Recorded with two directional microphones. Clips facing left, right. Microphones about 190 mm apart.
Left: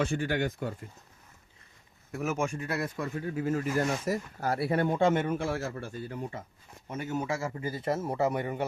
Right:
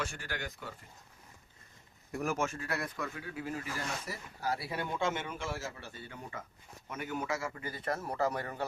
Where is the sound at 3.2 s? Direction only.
40° left (ahead or behind).